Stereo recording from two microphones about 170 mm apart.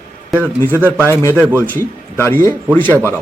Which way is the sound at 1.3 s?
10° right (ahead or behind).